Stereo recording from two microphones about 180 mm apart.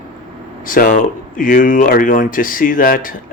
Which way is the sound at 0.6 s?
50° left (ahead or behind).